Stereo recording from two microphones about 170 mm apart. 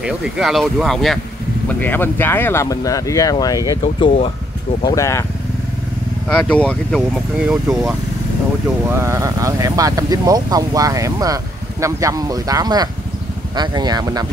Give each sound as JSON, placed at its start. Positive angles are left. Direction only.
{"t": 0.0, "sound": "speech", "side_deg": 0}
{"t": 3.8, "sound": "speech", "side_deg": 35}
{"t": 4.8, "sound": "speech", "side_deg": 15}
{"t": 6.2, "sound": "speech", "side_deg": 5}
{"t": 8.8, "sound": "speech", "side_deg": -15}